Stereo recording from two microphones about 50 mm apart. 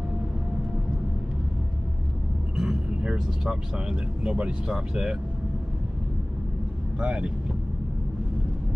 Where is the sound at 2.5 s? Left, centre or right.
Centre.